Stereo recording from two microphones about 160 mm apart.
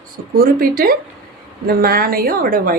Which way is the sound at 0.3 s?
65° right (ahead or behind).